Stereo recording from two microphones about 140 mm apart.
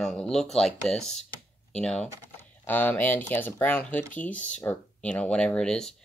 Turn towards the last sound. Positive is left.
turn(degrees=5)  # may be behind; listen again after turning